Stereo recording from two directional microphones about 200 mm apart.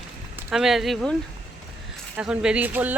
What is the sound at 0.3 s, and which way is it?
Speech, centre (ahead or behind).